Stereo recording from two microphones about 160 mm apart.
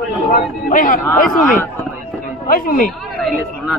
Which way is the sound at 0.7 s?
55° left (ahead or behind).